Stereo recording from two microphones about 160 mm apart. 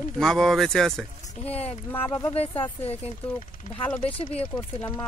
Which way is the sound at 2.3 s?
35° left (ahead or behind).